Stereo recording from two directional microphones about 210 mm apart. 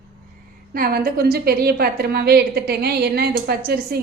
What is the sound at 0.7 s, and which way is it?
A woman's voice, 45° right (ahead or behind).